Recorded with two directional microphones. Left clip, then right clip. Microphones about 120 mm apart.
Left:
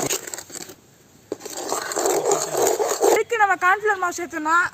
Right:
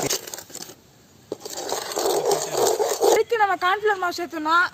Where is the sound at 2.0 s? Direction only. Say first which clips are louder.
Left 1 dB; 15° left (ahead or behind).